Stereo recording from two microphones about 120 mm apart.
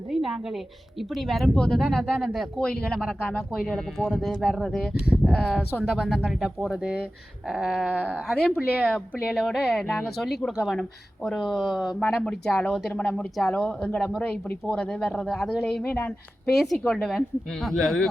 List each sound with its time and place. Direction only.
0.1 s speech: 5° right (ahead or behind)
7.9 s speech: 10° right (ahead or behind)
8.3 s speech: 5° left (ahead or behind)
15.8 s speech: 15° left (ahead or behind)
16.6 s speech: 5° left (ahead or behind)